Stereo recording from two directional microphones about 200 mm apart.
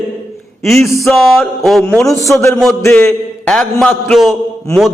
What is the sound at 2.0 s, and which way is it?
A man's voice, 15° left (ahead or behind).